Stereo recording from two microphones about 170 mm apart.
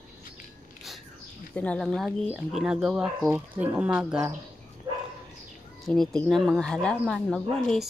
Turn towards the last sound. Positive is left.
turn(degrees=0)  # may be behind; listen again after turning